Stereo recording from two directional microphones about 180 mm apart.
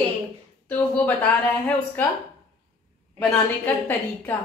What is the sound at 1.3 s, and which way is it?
Speech, 5° left (ahead or behind).